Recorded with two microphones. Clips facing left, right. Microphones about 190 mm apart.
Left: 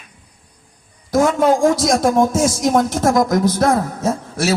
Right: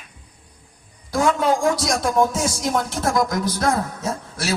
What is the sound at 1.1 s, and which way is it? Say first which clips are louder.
A man's voice: left 5 dB; 45° left (ahead or behind).